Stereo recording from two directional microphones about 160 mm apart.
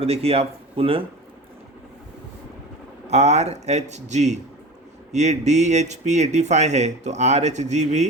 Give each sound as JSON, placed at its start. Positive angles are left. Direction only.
{"t": 0.0, "sound": "speech", "side_deg": -40}
{"t": 3.1, "sound": "speech", "side_deg": -45}